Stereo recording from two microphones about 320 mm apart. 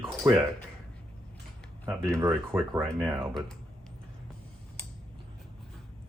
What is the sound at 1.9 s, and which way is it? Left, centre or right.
Speech, centre.